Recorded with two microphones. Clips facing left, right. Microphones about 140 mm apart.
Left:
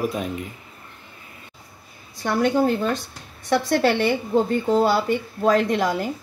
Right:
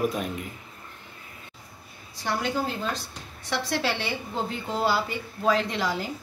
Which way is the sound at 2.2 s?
55° left (ahead or behind).